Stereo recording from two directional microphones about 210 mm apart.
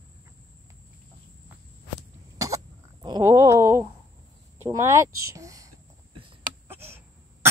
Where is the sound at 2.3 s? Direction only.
15° right (ahead or behind).